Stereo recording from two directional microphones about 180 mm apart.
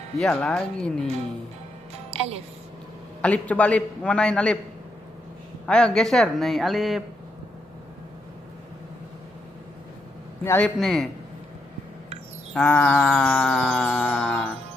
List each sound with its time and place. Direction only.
0.2 s wind chime: 5° left (ahead or behind)
2.1 s speech: 35° right (ahead or behind)
3.2 s a man's voice: 10° left (ahead or behind)
5.7 s wind chime: 5° left (ahead or behind)
10.4 s a man's voice: 10° left (ahead or behind)
10.8 s wind chime: centre (ahead or behind)
12.5 s wind chime: 10° left (ahead or behind)